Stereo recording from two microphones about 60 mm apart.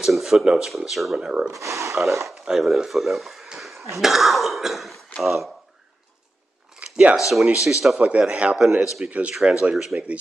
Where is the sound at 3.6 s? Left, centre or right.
Centre.